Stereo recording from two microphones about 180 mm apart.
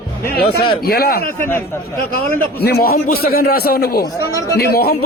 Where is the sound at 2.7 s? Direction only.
60° left (ahead or behind).